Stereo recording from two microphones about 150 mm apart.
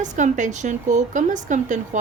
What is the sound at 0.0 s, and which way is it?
Speech, 55° right (ahead or behind).